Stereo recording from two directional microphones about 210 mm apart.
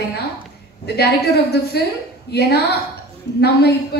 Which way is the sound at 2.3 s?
50° left (ahead or behind).